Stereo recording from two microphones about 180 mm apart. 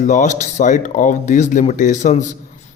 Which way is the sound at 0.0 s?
45° left (ahead or behind).